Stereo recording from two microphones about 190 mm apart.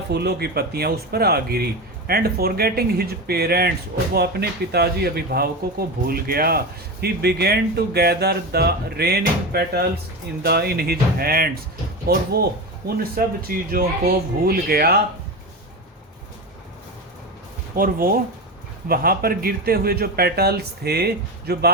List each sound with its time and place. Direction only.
0.1 s speech: 60° right (ahead or behind)
17.7 s speech: 50° right (ahead or behind)